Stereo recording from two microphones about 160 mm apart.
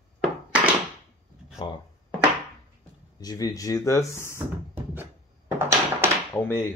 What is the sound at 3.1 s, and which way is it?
Speech, 25° left (ahead or behind).